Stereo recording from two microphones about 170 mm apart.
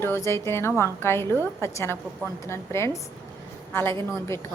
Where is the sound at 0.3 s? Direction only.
15° left (ahead or behind).